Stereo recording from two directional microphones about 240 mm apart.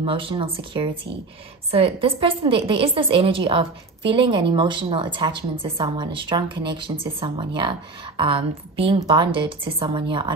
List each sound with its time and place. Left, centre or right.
0.0 s a woman's voice: right